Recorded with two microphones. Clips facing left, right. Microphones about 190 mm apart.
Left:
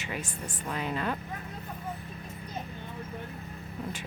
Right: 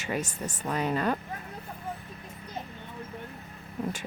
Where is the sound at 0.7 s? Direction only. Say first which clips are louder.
Right 5 dB; 40° right (ahead or behind).